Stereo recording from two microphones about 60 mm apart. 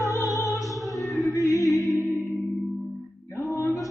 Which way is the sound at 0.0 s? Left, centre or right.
Left.